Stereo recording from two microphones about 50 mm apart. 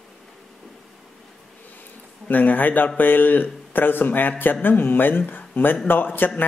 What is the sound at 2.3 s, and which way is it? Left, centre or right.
A man's voice, left.